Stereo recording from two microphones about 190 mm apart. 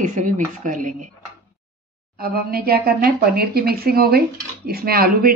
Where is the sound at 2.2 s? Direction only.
55° right (ahead or behind).